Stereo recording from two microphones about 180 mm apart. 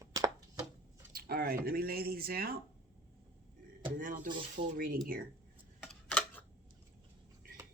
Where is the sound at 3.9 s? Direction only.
50° right (ahead or behind).